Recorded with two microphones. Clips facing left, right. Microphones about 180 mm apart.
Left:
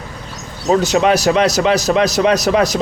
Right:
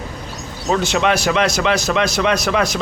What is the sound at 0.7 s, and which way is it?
A man's voice, 35° left (ahead or behind).